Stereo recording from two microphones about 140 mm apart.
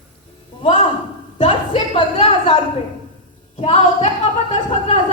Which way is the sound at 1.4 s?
55° left (ahead or behind).